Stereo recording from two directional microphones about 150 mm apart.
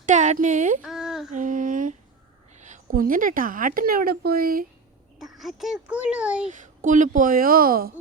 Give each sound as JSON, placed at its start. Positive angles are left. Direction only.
{"t": 0.0, "sound": "speech", "side_deg": -55}
{"t": 0.8, "sound": "a sound", "side_deg": 0}
{"t": 1.3, "sound": "female singing", "side_deg": -60}
{"t": 2.6, "sound": "a woman's voice", "side_deg": -55}
{"t": 5.2, "sound": "speech", "side_deg": 0}
{"t": 6.5, "sound": "speech", "side_deg": -60}